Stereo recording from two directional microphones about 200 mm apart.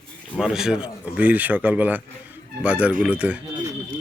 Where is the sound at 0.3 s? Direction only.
Centre (ahead or behind).